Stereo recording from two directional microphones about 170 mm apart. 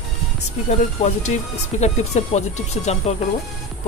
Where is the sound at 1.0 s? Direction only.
40° left (ahead or behind).